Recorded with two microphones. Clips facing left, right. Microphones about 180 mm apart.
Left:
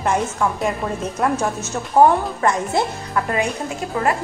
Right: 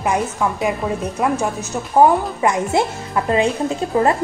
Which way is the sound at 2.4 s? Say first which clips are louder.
Right 3 dB; 20° right (ahead or behind).